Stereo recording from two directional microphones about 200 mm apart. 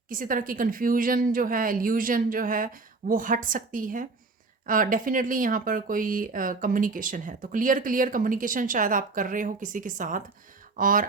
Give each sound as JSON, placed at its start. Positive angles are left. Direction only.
{"t": 0.1, "sound": "a woman's voice", "side_deg": -45}